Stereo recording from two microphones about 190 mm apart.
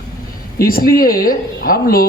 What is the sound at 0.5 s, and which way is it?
Speech, 50° left (ahead or behind).